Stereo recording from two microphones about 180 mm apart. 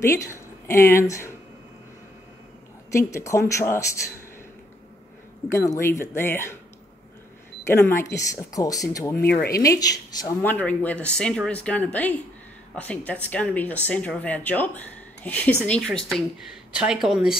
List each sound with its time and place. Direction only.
0.0 s speech: 15° left (ahead or behind)
2.9 s speech: 15° left (ahead or behind)
5.5 s speech: 15° left (ahead or behind)
7.6 s speech: 15° left (ahead or behind); by 17.4 s 5° right (ahead or behind)